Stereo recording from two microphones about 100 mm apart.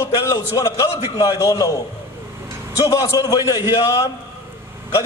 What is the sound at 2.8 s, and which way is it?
A man's voice, 35° left (ahead or behind).